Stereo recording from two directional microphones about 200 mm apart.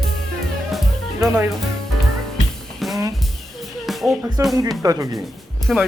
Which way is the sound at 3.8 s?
Centre (ahead or behind).